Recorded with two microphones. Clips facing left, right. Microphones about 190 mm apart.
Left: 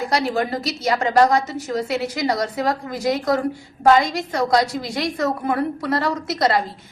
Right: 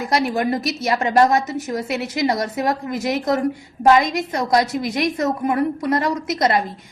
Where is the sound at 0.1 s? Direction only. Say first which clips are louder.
Right 4 dB; 20° right (ahead or behind).